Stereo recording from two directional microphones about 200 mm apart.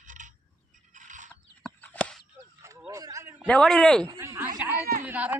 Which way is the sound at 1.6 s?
5° left (ahead or behind).